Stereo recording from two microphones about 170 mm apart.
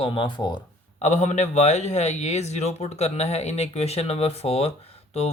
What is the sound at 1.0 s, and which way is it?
Speech, 45° left (ahead or behind).